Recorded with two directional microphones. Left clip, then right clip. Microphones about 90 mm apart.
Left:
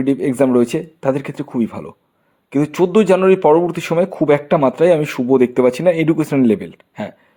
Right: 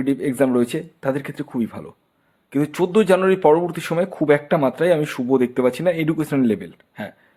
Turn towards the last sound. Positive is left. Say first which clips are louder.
# left 5 dB
turn(degrees=40)  # may be behind; listen again after turning